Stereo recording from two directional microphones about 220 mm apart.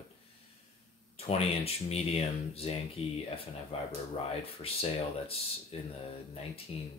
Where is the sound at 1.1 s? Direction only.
25° left (ahead or behind).